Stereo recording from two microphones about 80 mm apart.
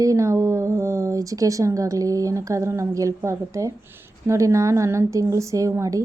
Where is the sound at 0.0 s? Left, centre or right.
Right.